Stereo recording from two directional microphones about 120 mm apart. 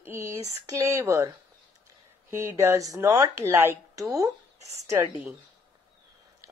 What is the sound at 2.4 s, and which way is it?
Speech, 25° right (ahead or behind).